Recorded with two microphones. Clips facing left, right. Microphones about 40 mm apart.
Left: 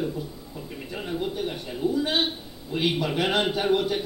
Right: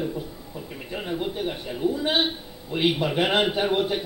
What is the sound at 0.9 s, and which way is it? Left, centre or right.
Speech, centre.